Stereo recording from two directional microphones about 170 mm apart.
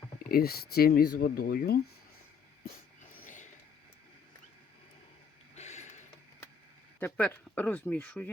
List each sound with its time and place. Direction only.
0.3 s speech: 65° left (ahead or behind)
3.2 s a sound: 50° left (ahead or behind)
5.5 s mechanisms: 40° left (ahead or behind)
7.0 s speech: 10° left (ahead or behind)